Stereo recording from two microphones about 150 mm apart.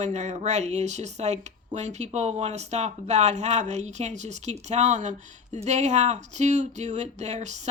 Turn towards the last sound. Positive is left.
turn(degrees=-50)  # may be behind; listen again after turning